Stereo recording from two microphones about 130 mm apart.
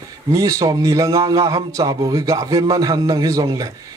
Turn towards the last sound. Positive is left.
turn(degrees=-25)  # may be behind; listen again after turning